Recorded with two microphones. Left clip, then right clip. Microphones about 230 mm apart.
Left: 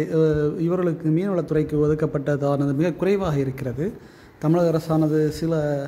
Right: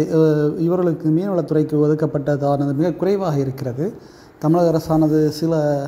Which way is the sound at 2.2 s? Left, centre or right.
Left.